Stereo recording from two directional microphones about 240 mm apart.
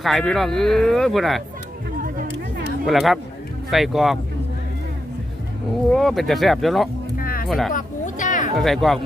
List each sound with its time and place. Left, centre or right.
0.0 s speech: centre
2.8 s speech: centre
5.9 s speech: centre
7.2 s music: left
7.4 s speech: centre
7.7 s a sound: left
8.5 s speech: centre